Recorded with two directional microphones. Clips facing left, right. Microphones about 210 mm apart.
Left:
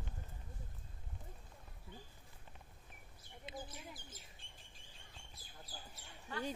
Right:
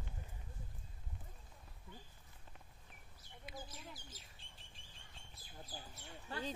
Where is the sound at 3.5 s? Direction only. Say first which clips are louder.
Left 3 dB; 25° left (ahead or behind).